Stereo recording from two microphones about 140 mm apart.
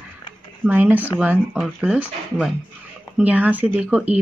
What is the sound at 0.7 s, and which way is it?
A woman's voice, 10° right (ahead or behind).